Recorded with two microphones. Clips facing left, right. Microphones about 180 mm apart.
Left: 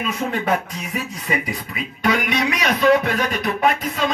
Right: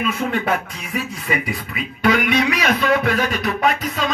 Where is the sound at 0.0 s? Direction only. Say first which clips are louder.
Right 2 dB; 35° left (ahead or behind).